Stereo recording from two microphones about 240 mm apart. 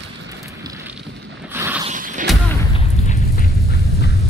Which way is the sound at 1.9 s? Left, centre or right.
Right.